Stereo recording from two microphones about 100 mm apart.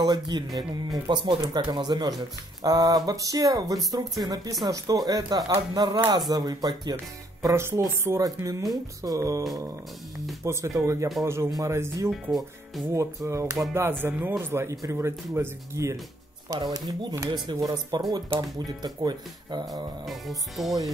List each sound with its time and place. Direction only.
0.0 s speech: 45° right (ahead or behind)
7.4 s speech: 30° right (ahead or behind)
10.4 s speech: 30° right (ahead or behind)
12.1 s speech: centre (ahead or behind)
12.8 s speech: 30° right (ahead or behind)
16.5 s speech: 40° right (ahead or behind)
20.1 s speech: centre (ahead or behind)